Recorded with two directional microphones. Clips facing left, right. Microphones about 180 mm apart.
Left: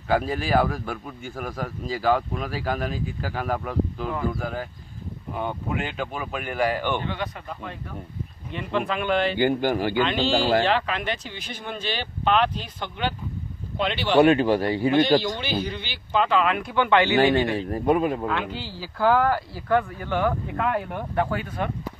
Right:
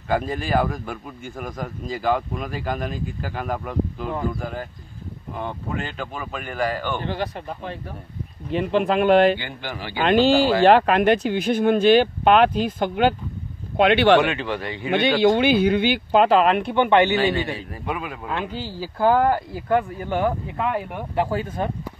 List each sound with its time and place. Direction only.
0.1 s speech: 5° left (ahead or behind)
7.1 s speech: 35° right (ahead or behind)
9.4 s a man's voice: 45° left (ahead or behind)
9.9 s speech: 50° right (ahead or behind)
13.7 s speech: 65° right (ahead or behind)
14.2 s a man's voice: 35° left (ahead or behind)
14.9 s speech: 65° right (ahead or behind); by 16.5 s 40° right (ahead or behind)
16.6 s speech: 20° right (ahead or behind)
17.2 s a man's voice: 50° left (ahead or behind)
18.5 s speech: 45° right (ahead or behind)
18.9 s speech: 20° right (ahead or behind)
20.5 s speech: 5° right (ahead or behind)
21.5 s speech: 20° right (ahead or behind)